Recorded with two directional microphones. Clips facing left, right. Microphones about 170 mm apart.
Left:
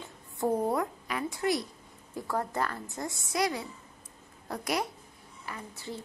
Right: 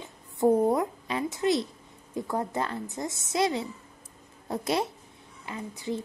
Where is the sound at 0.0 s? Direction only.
20° right (ahead or behind).